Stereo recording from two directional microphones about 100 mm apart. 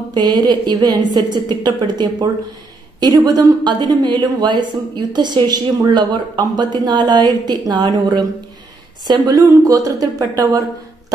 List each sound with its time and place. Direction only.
0.1 s a woman's voice: 45° right (ahead or behind)